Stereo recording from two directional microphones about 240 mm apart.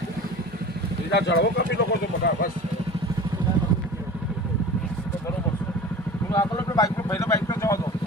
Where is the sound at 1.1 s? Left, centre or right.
Left.